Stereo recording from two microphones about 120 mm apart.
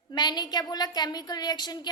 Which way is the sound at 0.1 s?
35° left (ahead or behind).